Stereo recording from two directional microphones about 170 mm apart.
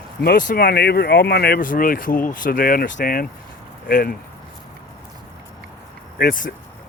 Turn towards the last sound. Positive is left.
turn(degrees=50)  # may be behind; listen again after turning